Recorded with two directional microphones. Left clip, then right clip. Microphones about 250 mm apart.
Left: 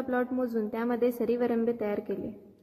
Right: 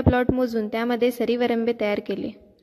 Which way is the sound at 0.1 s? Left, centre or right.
Right.